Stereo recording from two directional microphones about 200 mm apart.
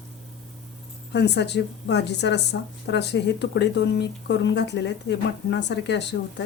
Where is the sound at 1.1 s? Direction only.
60° left (ahead or behind).